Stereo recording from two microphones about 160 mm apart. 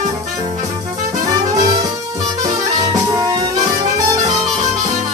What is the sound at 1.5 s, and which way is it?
Music, 20° right (ahead or behind).